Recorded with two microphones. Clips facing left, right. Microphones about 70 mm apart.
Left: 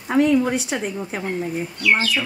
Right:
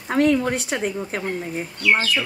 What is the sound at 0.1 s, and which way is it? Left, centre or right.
A woman's voice, right.